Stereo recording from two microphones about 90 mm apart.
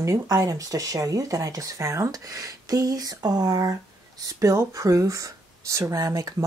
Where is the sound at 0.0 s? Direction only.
40° right (ahead or behind).